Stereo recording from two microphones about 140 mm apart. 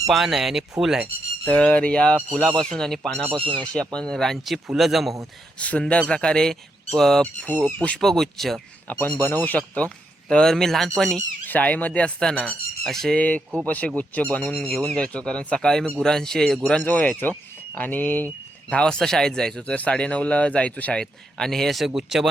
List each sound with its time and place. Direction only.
0.1 s a man's voice: centre (ahead or behind)
1.5 s a man's voice: 5° left (ahead or behind)
3.3 s speech: 35° right (ahead or behind)
3.8 s a man's voice: 5° left (ahead or behind)
5.5 s a man's voice: 10° left (ahead or behind)
9.2 s a man's voice: 15° left (ahead or behind); by 22.3 s 5° right (ahead or behind)